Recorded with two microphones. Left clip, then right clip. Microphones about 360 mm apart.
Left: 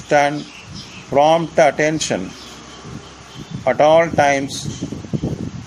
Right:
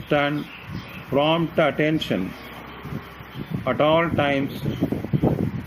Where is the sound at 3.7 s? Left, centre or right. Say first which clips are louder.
Left 7 dB; centre.